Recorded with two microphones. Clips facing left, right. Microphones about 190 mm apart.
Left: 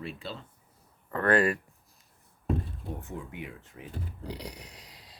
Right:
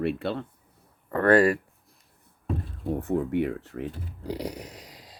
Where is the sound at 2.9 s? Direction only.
60° right (ahead or behind).